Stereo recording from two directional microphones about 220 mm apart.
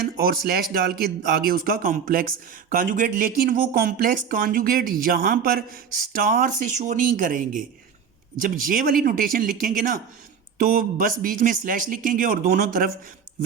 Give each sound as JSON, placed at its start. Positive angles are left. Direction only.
{"t": 0.2, "sound": "speech", "side_deg": -45}